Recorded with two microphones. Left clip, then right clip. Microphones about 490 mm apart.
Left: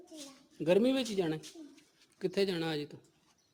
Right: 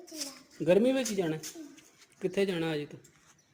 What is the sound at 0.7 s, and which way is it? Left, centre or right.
Speech, left.